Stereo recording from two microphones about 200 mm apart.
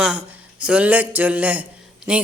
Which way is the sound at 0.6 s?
5° right (ahead or behind).